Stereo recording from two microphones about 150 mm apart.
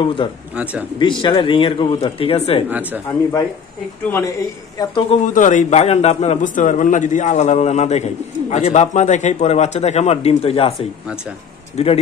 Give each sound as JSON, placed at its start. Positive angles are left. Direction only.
{"t": 0.0, "sound": "speech", "side_deg": 35}
{"t": 3.1, "sound": "speech", "side_deg": 20}
{"t": 5.1, "sound": "a man's voice", "side_deg": 55}
{"t": 11.7, "sound": "a man's voice", "side_deg": 40}